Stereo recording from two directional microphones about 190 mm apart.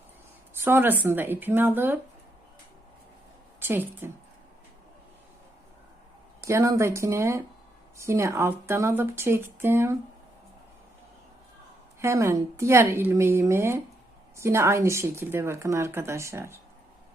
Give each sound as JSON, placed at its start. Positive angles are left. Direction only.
{"t": 0.6, "sound": "a woman's voice", "side_deg": -10}
{"t": 3.6, "sound": "a woman's voice", "side_deg": -10}
{"t": 6.4, "sound": "a woman's voice", "side_deg": -15}
{"t": 11.9, "sound": "a woman's voice", "side_deg": -15}